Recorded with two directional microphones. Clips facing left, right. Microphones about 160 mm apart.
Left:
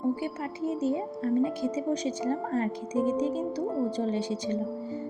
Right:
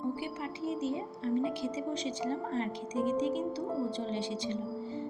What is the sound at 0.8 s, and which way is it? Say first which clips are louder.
Speech: left 6 dB; 45° left (ahead or behind).